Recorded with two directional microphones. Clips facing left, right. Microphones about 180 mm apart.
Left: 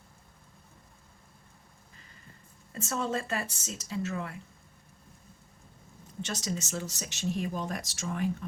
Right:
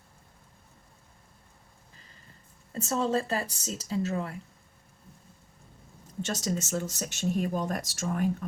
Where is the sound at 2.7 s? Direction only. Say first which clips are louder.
Right 4 dB; 35° right (ahead or behind).